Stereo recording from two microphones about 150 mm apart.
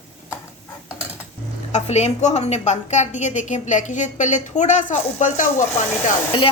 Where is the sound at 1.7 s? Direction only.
50° left (ahead or behind).